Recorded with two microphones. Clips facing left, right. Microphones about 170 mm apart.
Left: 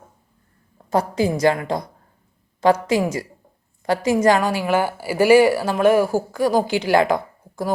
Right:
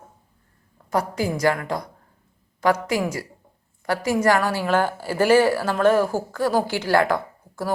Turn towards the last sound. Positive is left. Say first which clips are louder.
# left 2 dB
turn(degrees=15)  # may be behind; listen again after turning